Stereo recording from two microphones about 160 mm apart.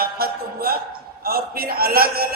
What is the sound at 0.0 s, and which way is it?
Music, 70° right (ahead or behind).